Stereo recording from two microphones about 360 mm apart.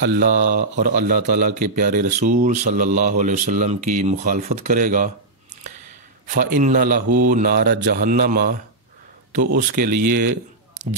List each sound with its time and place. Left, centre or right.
0.0 s speech: right
6.3 s speech: right